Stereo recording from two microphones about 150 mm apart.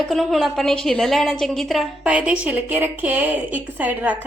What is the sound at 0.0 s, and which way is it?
A woman's voice, centre (ahead or behind).